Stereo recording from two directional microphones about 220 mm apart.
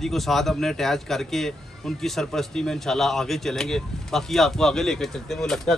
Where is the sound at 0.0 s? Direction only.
Centre (ahead or behind).